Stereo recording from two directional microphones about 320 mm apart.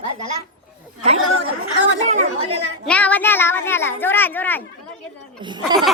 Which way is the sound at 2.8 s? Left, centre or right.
Centre.